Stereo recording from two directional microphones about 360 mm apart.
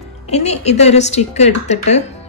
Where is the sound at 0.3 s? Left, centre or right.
Centre.